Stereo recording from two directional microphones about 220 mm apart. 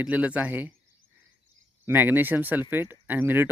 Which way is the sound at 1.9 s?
10° right (ahead or behind).